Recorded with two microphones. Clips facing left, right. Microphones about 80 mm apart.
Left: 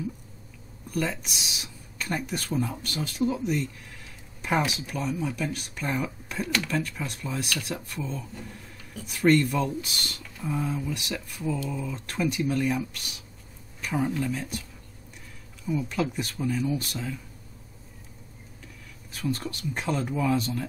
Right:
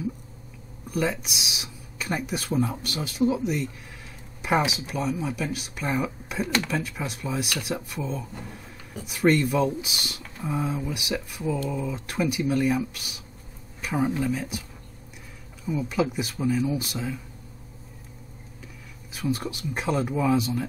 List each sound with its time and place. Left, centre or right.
0.9 s speech: centre
6.4 s speech: right
6.7 s speech: centre
15.6 s speech: centre
19.1 s speech: centre